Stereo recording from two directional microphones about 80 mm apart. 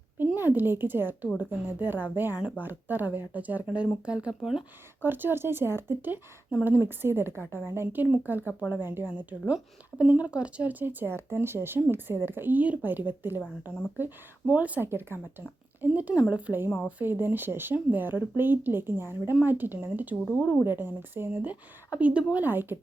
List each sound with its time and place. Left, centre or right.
0.2 s a woman's voice: right; by 4.6 s centre
5.0 s speech: right